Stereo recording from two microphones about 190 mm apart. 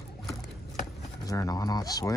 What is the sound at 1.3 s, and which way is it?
Speech, 20° left (ahead or behind).